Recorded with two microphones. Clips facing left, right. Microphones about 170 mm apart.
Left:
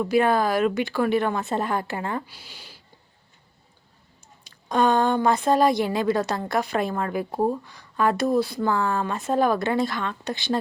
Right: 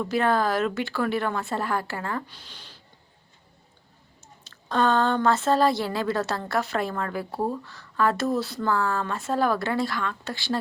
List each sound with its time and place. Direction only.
0.0 s a woman's voice: 15° left (ahead or behind)
4.4 s a woman's voice: 15° left (ahead or behind)